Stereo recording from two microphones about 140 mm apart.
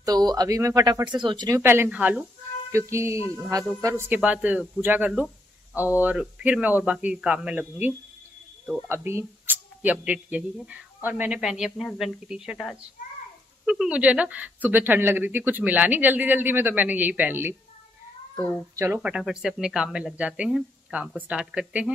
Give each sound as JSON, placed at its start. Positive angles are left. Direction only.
{"t": 0.0, "sound": "speech", "side_deg": -30}
{"t": 1.5, "sound": "speech", "side_deg": -15}
{"t": 2.9, "sound": "speech", "side_deg": -20}
{"t": 18.8, "sound": "speech", "side_deg": -10}